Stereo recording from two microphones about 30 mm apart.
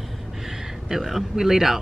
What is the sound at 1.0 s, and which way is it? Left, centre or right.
Speech, centre.